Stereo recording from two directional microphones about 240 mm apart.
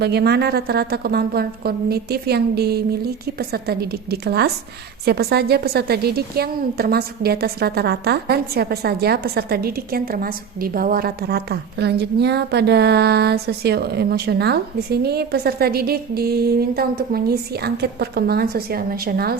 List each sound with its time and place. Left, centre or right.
0.0 s a woman's voice: right